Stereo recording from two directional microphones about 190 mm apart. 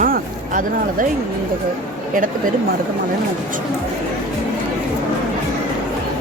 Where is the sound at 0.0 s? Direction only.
45° right (ahead or behind).